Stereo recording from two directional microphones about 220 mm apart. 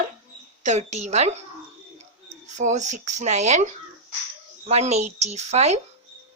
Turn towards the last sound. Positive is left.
turn(degrees=-30)  # may be behind; listen again after turning